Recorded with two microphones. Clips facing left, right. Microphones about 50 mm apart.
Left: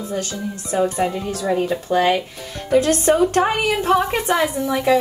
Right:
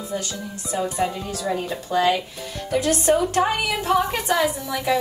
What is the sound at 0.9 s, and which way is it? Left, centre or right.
A woman's voice, left.